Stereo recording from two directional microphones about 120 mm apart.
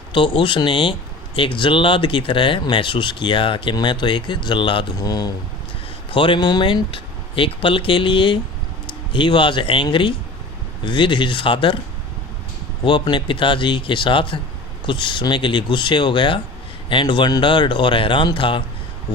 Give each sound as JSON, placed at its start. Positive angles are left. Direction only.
{"t": 0.1, "sound": "speech", "side_deg": 45}
{"t": 4.9, "sound": "speech", "side_deg": 30}
{"t": 6.1, "sound": "speech", "side_deg": 40}
{"t": 12.8, "sound": "speech", "side_deg": 40}